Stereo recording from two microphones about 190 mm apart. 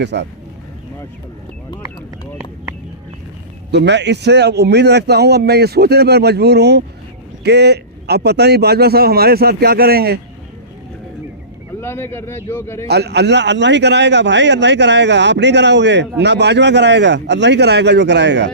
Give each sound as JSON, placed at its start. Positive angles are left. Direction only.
{"t": 0.0, "sound": "a man's voice", "side_deg": -65}
{"t": 3.7, "sound": "a man's voice", "side_deg": -65}
{"t": 11.8, "sound": "a man's voice", "side_deg": 15}
{"t": 12.9, "sound": "a man's voice", "side_deg": -60}